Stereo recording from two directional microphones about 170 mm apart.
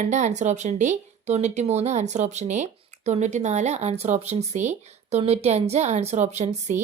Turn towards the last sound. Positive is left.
turn(degrees=-45)  # may be behind; listen again after turning